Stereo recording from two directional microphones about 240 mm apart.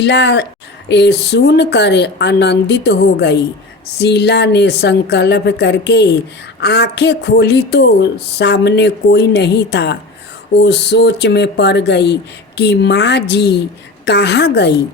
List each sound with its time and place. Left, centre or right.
0.0 s speech: left